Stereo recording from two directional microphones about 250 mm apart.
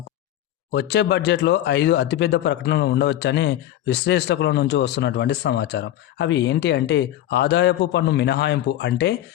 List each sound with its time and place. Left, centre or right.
0.7 s speech: left